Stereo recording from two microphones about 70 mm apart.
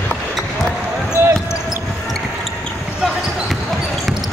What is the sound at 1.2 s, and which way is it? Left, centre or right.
Basketball bounce, right.